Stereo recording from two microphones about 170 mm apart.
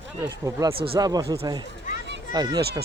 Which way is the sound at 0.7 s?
30° right (ahead or behind).